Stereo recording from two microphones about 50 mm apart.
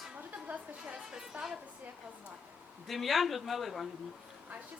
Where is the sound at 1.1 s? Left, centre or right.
Centre.